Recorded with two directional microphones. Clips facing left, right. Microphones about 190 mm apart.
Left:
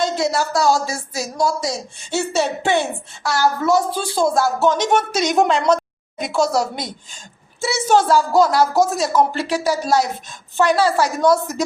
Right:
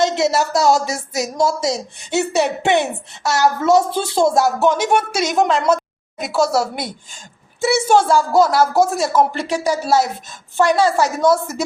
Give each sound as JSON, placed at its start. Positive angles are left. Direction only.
{"t": 0.0, "sound": "a woman's voice", "side_deg": -25}
{"t": 9.4, "sound": "speech", "side_deg": 10}
{"t": 9.8, "sound": "a woman's voice", "side_deg": -5}